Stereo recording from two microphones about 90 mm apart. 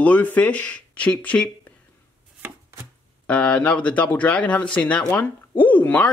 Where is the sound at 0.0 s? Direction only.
15° left (ahead or behind).